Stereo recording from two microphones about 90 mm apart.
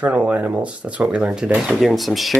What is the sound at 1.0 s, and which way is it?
Speech, 10° right (ahead or behind).